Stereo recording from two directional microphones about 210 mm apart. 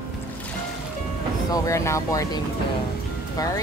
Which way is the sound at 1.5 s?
15° left (ahead or behind).